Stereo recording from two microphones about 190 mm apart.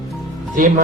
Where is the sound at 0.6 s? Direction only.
45° right (ahead or behind).